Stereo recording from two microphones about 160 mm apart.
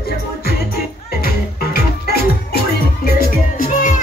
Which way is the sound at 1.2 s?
75° left (ahead or behind).